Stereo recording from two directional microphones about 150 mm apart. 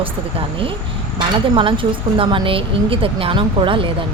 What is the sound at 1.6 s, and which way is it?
Speech, 35° right (ahead or behind).